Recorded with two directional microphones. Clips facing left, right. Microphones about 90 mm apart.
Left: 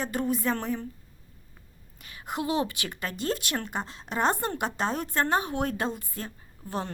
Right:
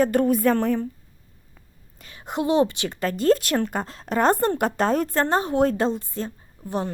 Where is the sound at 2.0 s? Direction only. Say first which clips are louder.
Right 5 dB; 30° right (ahead or behind).